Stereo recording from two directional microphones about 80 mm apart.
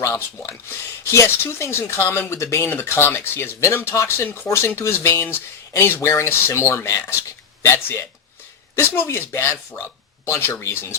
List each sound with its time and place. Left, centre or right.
0.0 s speech: left